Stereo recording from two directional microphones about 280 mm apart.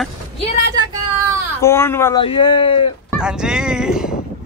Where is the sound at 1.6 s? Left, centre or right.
Centre.